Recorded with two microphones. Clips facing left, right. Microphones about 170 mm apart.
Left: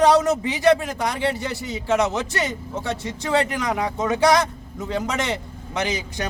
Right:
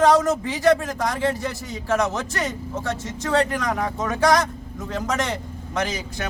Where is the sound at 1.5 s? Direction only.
75° left (ahead or behind).